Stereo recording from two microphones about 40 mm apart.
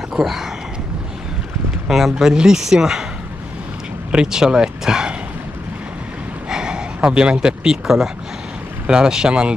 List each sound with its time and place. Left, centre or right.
0.1 s a man's voice: centre
1.9 s a man's voice: centre
4.1 s speech: centre
6.5 s speech: centre
8.8 s speech: centre